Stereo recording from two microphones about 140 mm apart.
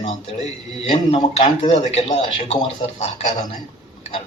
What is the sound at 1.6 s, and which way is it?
A man's voice, 55° left (ahead or behind).